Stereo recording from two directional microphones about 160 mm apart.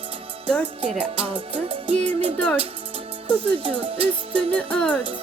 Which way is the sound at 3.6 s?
35° right (ahead or behind).